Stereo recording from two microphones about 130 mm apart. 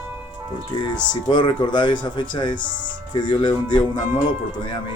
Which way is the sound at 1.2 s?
35° left (ahead or behind).